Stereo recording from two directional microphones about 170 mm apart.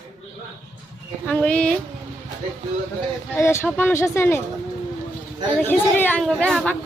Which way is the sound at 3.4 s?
15° left (ahead or behind).